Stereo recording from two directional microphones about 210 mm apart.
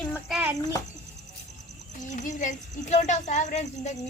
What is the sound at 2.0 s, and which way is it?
Speech, 35° left (ahead or behind).